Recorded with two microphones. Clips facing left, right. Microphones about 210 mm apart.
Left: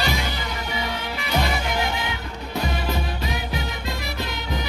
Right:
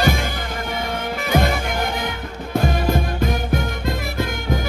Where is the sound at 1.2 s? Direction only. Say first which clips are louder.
Right 5 dB; 50° right (ahead or behind).